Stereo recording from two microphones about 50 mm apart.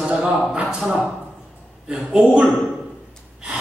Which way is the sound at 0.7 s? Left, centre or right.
Centre.